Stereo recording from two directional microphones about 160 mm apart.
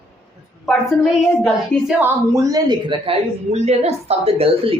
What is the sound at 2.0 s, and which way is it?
Speech, 15° right (ahead or behind).